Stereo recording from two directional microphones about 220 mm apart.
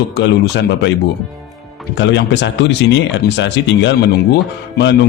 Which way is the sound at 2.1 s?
55° left (ahead or behind).